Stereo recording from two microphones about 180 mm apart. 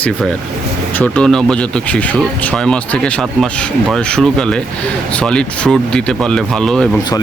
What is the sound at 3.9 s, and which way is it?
Speech, 5° left (ahead or behind).